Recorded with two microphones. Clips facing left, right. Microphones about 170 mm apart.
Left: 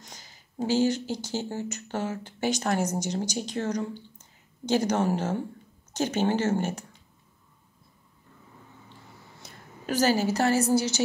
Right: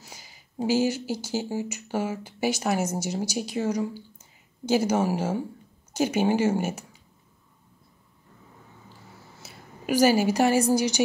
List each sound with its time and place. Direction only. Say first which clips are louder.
0.0 s speech: right 1 dB; 10° right (ahead or behind)
9.4 s a woman's voice: right 2 dB; 10° right (ahead or behind)